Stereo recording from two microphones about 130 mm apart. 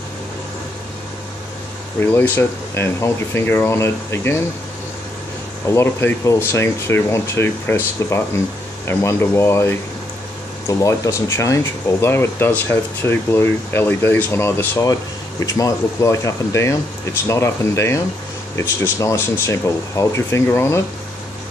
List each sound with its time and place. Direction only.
2.0 s speech: 15° left (ahead or behind)
5.7 s speech: 20° left (ahead or behind)